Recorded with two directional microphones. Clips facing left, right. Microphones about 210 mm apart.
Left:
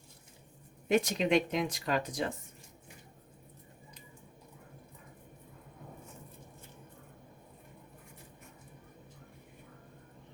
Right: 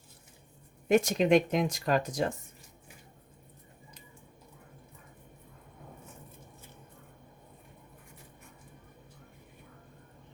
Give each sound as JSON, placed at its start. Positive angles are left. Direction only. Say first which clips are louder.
{"t": 0.9, "sound": "speech", "louder": "right 4 dB", "side_deg": -45}